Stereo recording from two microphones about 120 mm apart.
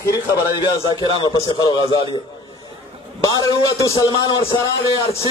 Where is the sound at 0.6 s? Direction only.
40° left (ahead or behind).